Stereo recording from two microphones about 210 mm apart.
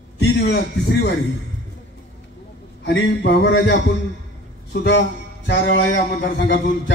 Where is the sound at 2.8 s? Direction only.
55° left (ahead or behind).